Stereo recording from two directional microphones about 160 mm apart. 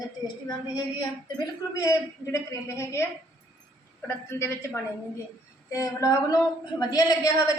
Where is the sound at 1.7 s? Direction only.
20° left (ahead or behind).